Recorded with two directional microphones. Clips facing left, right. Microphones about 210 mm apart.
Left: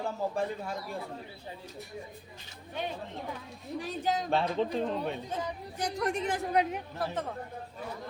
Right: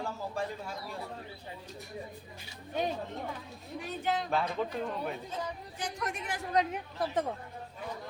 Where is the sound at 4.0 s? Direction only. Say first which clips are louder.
Left 1 dB; 40° left (ahead or behind).